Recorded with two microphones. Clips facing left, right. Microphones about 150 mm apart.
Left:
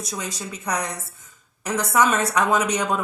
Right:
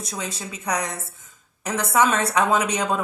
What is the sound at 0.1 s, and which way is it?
Speech, 30° right (ahead or behind).